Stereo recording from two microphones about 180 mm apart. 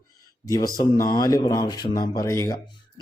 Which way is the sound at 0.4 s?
20° left (ahead or behind).